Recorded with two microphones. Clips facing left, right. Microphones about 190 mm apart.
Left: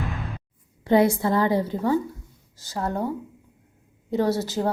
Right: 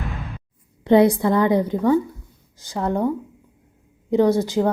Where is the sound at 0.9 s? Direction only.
20° right (ahead or behind).